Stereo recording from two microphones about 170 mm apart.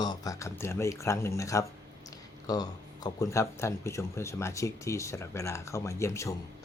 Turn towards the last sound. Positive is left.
turn(degrees=15)  # may be behind; listen again after turning